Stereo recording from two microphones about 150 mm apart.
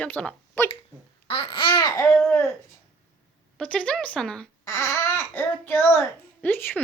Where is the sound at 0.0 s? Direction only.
10° left (ahead or behind).